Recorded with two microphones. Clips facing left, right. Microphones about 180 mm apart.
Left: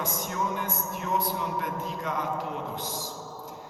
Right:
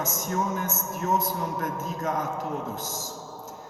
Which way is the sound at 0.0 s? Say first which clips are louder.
Right 2 dB; 45° right (ahead or behind).